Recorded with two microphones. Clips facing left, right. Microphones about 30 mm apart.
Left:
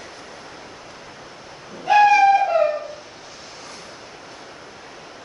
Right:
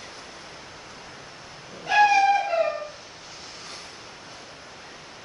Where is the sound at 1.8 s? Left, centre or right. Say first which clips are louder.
Left 5 dB; centre.